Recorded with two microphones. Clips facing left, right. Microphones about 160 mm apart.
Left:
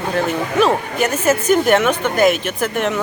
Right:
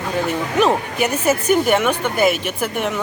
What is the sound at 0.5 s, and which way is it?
Speech, 15° right (ahead or behind).